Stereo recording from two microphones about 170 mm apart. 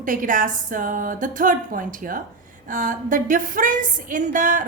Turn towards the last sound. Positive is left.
turn(degrees=-50)  # may be behind; listen again after turning